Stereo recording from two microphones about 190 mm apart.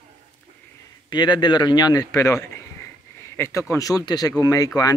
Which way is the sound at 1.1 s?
25° left (ahead or behind).